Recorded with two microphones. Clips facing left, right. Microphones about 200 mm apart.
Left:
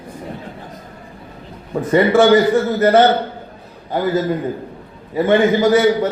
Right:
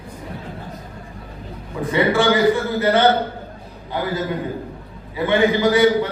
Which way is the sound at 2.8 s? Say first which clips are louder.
Left 8 dB; 45° left (ahead or behind).